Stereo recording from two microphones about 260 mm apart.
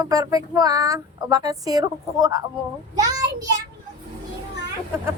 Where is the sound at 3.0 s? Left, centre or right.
Centre.